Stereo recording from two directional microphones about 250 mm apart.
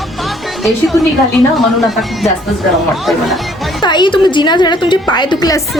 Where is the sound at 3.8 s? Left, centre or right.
Centre.